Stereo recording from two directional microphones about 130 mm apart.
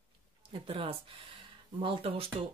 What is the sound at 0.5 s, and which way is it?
Speech, 45° right (ahead or behind).